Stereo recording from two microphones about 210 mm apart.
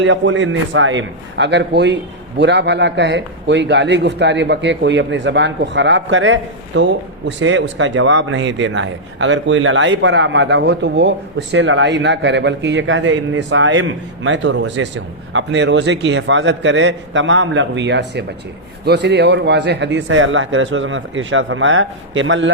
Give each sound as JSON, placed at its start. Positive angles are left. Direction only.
{"t": 0.0, "sound": "speech", "side_deg": -65}